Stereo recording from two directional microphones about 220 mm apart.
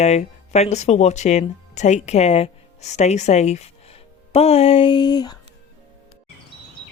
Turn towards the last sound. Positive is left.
turn(degrees=20)  # may be behind; listen again after turning